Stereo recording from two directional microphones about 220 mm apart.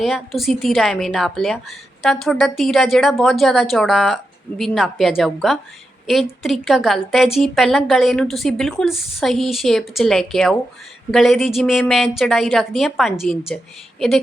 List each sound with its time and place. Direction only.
0.0 s a woman's voice: centre (ahead or behind)